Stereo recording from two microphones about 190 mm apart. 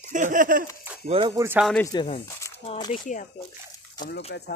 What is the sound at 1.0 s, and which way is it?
Speech, 25° right (ahead or behind).